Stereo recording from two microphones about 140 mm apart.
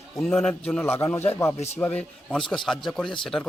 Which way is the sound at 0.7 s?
15° left (ahead or behind).